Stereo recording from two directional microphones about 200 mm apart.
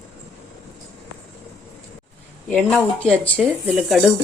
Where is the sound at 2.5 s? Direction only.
10° left (ahead or behind).